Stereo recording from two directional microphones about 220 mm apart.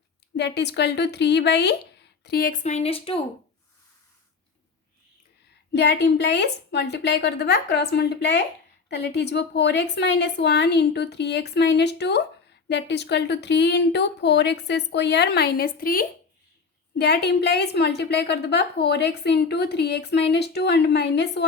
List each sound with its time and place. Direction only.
0.3 s a woman's voice: 50° left (ahead or behind); by 3.2 s 25° left (ahead or behind)
5.7 s a woman's voice: 50° left (ahead or behind)